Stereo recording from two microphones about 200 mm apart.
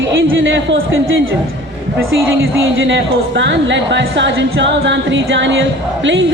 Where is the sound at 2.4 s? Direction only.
70° right (ahead or behind).